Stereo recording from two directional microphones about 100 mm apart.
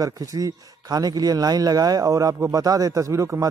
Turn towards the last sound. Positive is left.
turn(degrees=-30)  # may be behind; listen again after turning